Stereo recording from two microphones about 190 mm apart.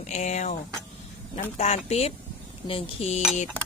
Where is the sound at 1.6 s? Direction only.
35° left (ahead or behind).